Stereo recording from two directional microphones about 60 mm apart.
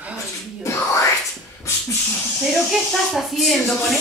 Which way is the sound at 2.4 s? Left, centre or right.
Centre.